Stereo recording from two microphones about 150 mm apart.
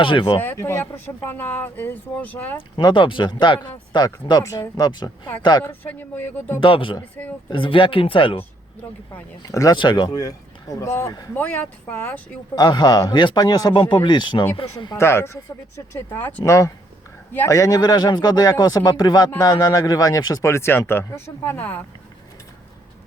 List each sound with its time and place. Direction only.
0.0 s speech: 35° left (ahead or behind)
0.3 s speech: 15° left (ahead or behind)
2.6 s speech: 35° left (ahead or behind)
5.8 s speech: 15° left (ahead or behind)
6.6 s speech: 35° left (ahead or behind)
9.1 s speech: 20° left (ahead or behind)
11.3 s speech: 10° left (ahead or behind)
12.5 s speech: 30° left (ahead or behind)
14.9 s speech: 15° left (ahead or behind)